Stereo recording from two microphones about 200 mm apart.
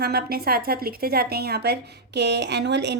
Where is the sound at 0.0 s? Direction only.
50° right (ahead or behind).